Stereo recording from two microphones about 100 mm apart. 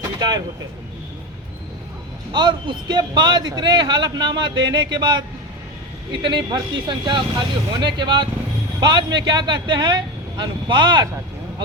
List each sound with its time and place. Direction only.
0.2 s a sound: 45° right (ahead or behind)
2.3 s a man's voice: 50° right (ahead or behind)
6.2 s a man's voice: 55° right (ahead or behind)